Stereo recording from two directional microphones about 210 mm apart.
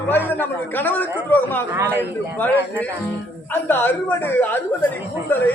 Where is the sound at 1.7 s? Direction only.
10° right (ahead or behind).